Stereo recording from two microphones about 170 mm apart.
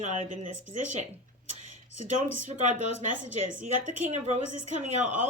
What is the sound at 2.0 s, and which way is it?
Speech, 45° right (ahead or behind).